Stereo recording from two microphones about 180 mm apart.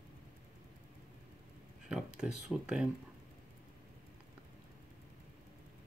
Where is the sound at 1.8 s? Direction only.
5° right (ahead or behind).